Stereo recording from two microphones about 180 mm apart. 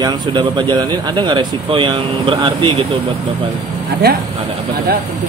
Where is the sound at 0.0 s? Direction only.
25° right (ahead or behind).